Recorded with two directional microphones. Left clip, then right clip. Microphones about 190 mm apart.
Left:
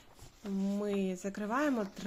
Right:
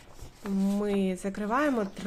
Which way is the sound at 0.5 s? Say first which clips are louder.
Right 6 dB; 5° left (ahead or behind).